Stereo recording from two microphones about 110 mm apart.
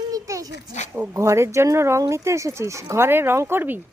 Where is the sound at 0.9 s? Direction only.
25° right (ahead or behind).